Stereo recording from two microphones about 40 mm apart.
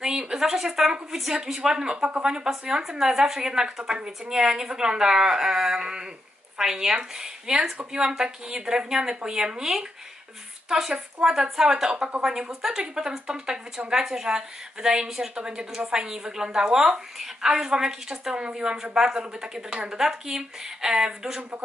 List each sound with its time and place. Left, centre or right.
0.2 s a woman's voice: centre
21.4 s a man's voice: right